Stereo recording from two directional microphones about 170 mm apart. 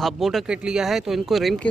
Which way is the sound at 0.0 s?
Centre (ahead or behind).